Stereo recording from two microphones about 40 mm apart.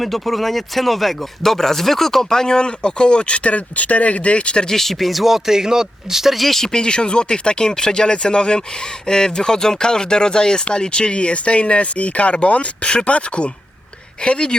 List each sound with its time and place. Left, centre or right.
0.0 s speech: centre; by 4.7 s left
4.7 s speech: centre
6.7 s speech: left